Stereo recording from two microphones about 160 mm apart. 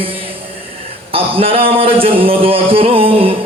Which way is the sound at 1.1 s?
35° right (ahead or behind).